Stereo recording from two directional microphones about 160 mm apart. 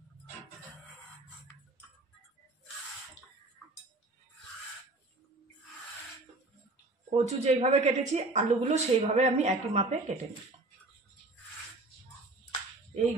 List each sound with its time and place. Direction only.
7.1 s a woman's voice: 40° right (ahead or behind)